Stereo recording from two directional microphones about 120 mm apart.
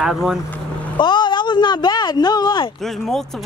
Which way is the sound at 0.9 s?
40° left (ahead or behind).